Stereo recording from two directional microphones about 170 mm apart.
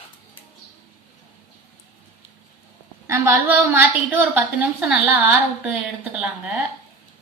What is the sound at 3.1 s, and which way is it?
A woman's voice, 10° right (ahead or behind).